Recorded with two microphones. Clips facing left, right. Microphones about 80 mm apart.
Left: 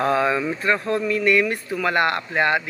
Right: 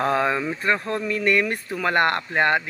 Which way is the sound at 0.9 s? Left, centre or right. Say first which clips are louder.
Left 3 dB; right.